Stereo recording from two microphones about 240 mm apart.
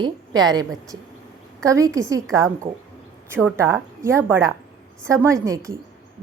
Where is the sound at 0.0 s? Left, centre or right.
Centre.